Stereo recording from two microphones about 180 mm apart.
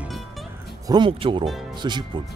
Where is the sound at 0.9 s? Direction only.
30° right (ahead or behind).